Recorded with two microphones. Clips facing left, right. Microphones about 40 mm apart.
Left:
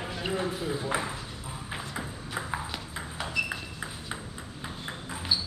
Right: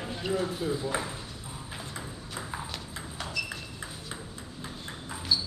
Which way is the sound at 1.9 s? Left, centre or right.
Left.